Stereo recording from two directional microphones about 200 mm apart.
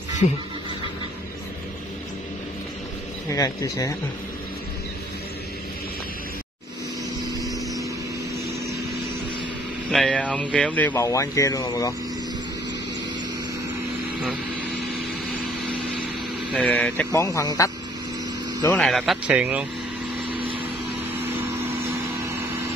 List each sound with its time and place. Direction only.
3.3 s speech: 15° left (ahead or behind)
9.8 s speech: 5° left (ahead or behind)
16.5 s a man's voice: 5° left (ahead or behind)
20.3 s vehicle: 25° right (ahead or behind)